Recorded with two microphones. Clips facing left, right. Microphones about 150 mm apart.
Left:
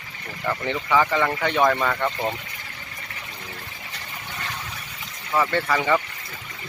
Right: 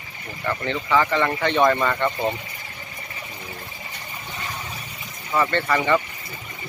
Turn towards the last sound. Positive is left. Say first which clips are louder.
# right 1 dB
turn(degrees=5)  # may be behind; listen again after turning